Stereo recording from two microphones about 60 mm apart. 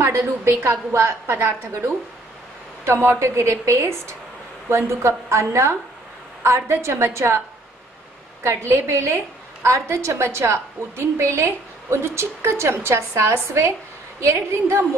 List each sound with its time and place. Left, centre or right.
0.0 s a woman's voice: right
2.8 s a woman's voice: right
8.5 s a woman's voice: right
8.8 s a woman's voice: right